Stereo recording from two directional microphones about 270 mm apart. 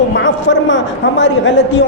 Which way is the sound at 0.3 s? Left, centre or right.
Left.